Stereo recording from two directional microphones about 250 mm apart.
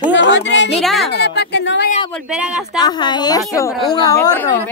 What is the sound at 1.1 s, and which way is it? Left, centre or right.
Speech, left.